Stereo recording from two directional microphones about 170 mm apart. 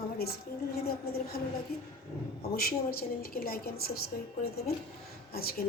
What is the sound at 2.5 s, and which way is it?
A woman's voice, 60° left (ahead or behind).